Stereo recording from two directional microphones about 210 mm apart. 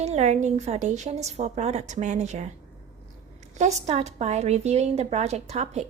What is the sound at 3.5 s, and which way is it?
A woman's voice, 35° right (ahead or behind).